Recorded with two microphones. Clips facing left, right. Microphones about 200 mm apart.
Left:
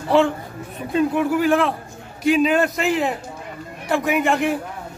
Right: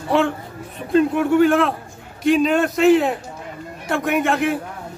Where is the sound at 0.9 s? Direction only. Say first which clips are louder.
Right 4 dB; centre (ahead or behind).